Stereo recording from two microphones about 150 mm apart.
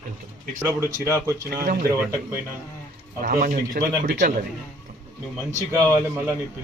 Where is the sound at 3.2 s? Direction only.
70° right (ahead or behind).